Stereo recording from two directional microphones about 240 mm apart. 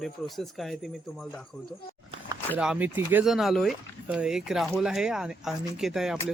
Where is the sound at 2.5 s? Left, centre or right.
Centre.